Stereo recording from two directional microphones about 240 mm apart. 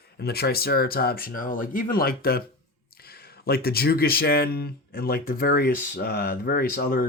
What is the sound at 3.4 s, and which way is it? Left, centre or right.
Speech, left.